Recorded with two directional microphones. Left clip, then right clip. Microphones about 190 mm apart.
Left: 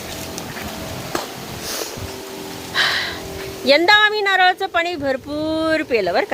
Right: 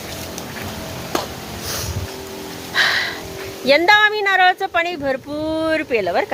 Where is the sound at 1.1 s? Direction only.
20° right (ahead or behind).